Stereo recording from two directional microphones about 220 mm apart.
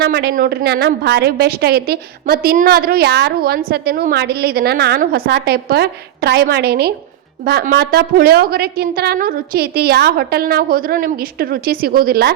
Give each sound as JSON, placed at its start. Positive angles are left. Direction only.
{"t": 0.0, "sound": "a woman's voice", "side_deg": -45}